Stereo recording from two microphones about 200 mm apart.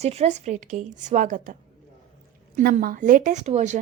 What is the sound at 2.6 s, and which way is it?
A woman's voice, 45° right (ahead or behind).